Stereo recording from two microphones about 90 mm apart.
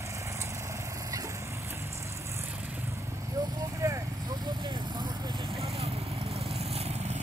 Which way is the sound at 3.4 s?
45° right (ahead or behind).